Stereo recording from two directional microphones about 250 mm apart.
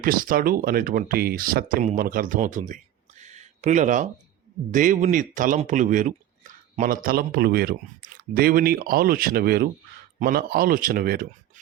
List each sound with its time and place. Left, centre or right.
0.0 s speech: right